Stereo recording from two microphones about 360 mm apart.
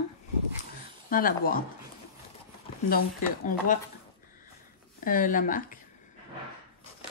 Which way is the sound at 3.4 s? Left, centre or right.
Left.